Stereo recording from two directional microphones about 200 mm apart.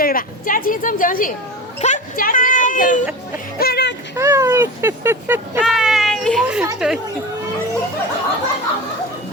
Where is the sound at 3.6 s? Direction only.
55° left (ahead or behind).